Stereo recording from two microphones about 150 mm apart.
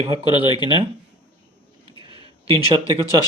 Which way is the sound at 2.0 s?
35° right (ahead or behind).